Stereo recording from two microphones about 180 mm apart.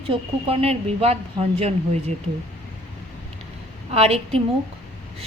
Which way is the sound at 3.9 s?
35° right (ahead or behind).